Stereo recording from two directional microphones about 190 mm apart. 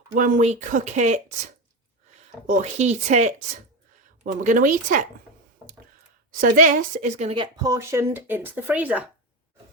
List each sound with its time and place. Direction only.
0.1 s speech: 45° right (ahead or behind)
2.5 s a woman's voice: 40° right (ahead or behind)
6.4 s speech: 45° right (ahead or behind); by 9.0 s 10° right (ahead or behind)